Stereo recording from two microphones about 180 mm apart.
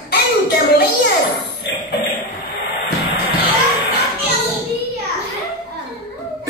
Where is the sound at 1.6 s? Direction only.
70° left (ahead or behind).